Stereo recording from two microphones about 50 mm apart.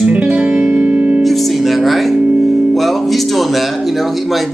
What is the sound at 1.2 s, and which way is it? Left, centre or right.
Music, centre.